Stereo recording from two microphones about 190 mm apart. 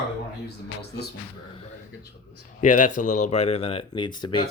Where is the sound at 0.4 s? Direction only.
60° left (ahead or behind).